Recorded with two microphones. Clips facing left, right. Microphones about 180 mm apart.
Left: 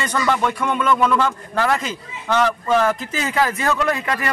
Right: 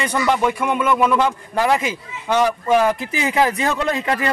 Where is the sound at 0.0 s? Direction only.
15° right (ahead or behind).